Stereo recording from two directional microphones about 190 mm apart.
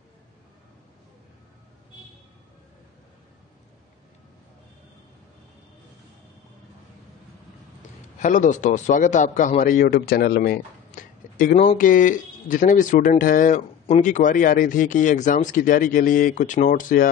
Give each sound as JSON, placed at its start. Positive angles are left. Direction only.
{"t": 8.2, "sound": "a man's voice", "side_deg": 40}